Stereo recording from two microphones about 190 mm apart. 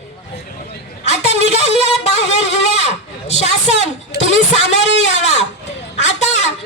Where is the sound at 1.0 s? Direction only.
35° left (ahead or behind).